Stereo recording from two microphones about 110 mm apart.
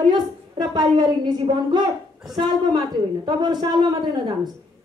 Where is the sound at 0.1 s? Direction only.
40° right (ahead or behind).